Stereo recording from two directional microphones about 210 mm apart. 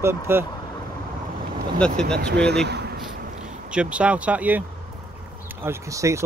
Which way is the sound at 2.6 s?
50° right (ahead or behind).